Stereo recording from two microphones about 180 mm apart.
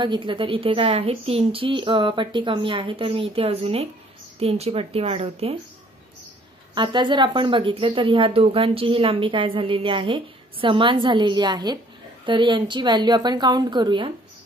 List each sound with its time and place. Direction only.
0.0 s a woman's voice: 25° right (ahead or behind)
6.7 s speech: 25° right (ahead or behind)